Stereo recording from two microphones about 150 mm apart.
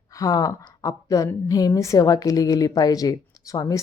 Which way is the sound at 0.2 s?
25° left (ahead or behind).